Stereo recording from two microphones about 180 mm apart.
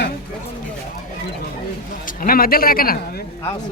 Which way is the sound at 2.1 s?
50° left (ahead or behind).